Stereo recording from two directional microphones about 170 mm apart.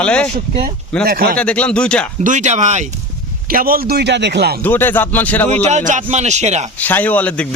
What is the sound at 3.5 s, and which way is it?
Speech, 60° right (ahead or behind).